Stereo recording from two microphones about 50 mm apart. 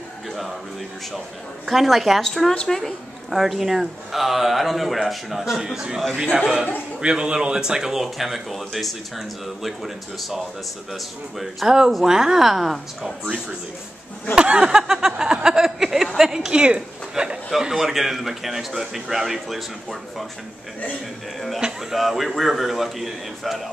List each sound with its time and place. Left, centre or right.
1.7 s speech: centre
14.3 s a sound: centre
16.2 s a man's voice: centre
17.5 s speech: centre
21.9 s speech: centre